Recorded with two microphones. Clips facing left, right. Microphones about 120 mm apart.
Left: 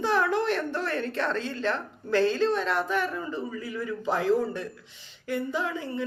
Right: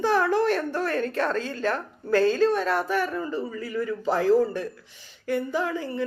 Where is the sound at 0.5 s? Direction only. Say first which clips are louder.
Right 3 dB; 10° right (ahead or behind).